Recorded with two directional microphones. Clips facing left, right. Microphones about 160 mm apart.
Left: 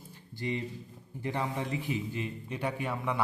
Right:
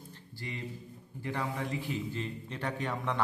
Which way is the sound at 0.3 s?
20° left (ahead or behind).